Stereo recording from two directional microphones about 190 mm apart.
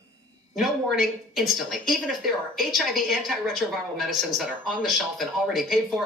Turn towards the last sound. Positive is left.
turn(degrees=0)  # may be behind; listen again after turning